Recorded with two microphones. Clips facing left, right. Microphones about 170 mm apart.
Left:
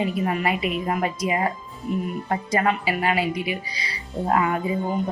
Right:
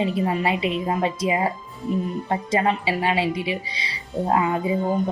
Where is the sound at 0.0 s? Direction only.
25° right (ahead or behind).